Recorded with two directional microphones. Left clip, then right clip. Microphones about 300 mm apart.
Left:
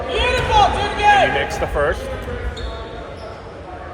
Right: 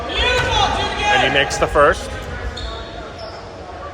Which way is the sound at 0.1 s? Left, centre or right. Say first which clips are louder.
Even; left.